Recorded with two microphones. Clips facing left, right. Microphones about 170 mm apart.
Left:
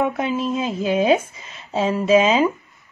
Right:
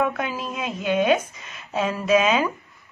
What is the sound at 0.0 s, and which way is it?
Speech, 25° left (ahead or behind).